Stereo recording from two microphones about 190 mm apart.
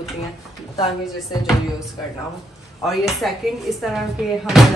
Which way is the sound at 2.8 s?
Centre (ahead or behind).